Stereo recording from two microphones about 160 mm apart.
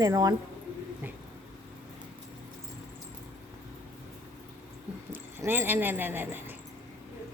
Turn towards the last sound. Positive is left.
turn(degrees=-15)  # may be behind; listen again after turning